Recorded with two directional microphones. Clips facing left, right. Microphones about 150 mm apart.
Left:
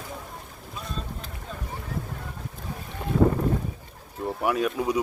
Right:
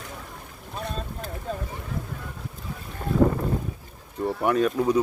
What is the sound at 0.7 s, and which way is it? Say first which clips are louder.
Boat: right 4 dB; 60° right (ahead or behind).